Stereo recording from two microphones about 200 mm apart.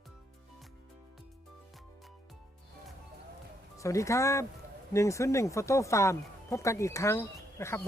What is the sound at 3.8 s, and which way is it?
Speech, 15° left (ahead or behind).